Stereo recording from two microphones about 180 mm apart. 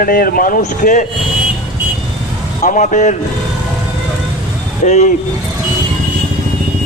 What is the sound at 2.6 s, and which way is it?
Speech, 45° left (ahead or behind).